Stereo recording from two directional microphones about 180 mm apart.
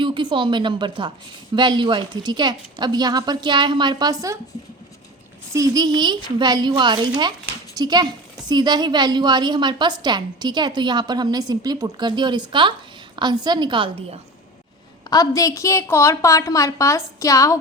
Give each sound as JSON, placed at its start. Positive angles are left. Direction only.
{"t": 0.0, "sound": "a woman's voice", "side_deg": -25}
{"t": 5.5, "sound": "a woman's voice", "side_deg": -20}
{"t": 15.1, "sound": "a woman's voice", "side_deg": 20}